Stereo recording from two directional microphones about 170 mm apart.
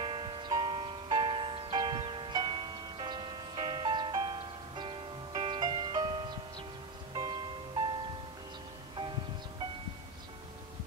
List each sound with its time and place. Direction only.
0.0 s music: 30° right (ahead or behind)